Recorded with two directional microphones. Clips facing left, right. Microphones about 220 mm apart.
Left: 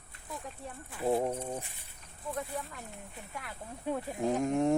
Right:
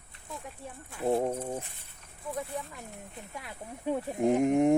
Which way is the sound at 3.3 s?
20° right (ahead or behind).